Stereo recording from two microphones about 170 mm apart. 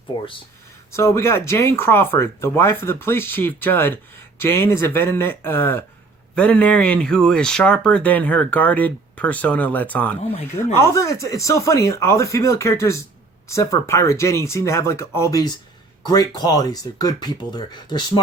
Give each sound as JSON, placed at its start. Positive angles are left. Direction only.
{"t": 0.1, "sound": "speech", "side_deg": 25}
{"t": 0.9, "sound": "speech", "side_deg": 15}